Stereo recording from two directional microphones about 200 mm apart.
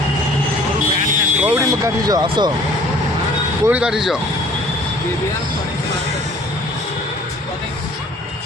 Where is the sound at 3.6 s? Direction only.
5° right (ahead or behind).